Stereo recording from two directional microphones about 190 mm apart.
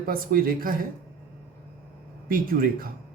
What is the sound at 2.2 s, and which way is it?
Speech, 50° right (ahead or behind).